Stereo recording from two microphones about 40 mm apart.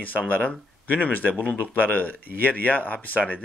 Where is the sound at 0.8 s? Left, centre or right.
Left.